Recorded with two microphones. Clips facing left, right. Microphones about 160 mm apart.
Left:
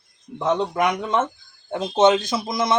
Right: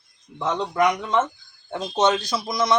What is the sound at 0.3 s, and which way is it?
Speech, 20° left (ahead or behind).